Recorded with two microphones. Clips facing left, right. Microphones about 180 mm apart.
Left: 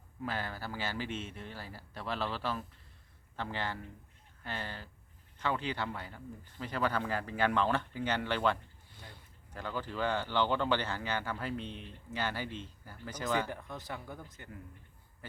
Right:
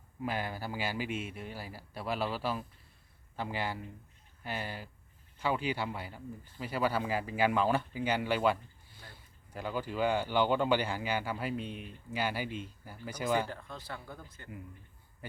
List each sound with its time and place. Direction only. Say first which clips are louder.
0.2 s speech: right 3 dB; 15° right (ahead or behind)
13.5 s a man's voice: left 1 dB; 15° left (ahead or behind)
15.2 s speech: right 4 dB; 15° right (ahead or behind)